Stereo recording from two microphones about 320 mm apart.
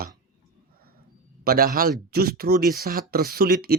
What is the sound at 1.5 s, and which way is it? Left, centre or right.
Speech, right.